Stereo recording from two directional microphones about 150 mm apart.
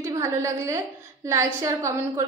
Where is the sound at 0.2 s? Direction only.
20° right (ahead or behind).